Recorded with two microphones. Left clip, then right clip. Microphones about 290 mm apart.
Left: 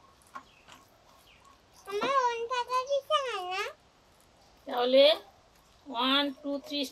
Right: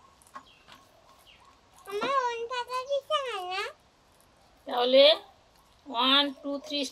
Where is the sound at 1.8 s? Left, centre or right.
Centre.